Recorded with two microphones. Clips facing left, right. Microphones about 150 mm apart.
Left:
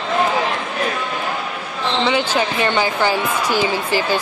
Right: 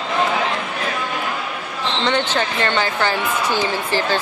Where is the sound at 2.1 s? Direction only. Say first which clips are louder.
Even; 10° left (ahead or behind).